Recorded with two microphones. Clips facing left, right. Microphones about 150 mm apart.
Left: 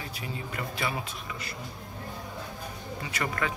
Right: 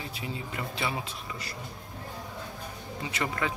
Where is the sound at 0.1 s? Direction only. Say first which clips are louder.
Even; 25° right (ahead or behind).